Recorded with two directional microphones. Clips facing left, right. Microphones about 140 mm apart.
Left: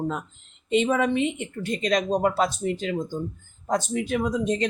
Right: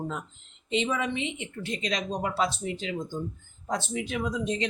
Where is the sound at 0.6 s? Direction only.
50° left (ahead or behind).